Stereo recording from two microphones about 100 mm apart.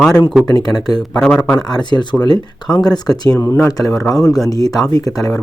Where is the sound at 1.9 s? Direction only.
50° left (ahead or behind).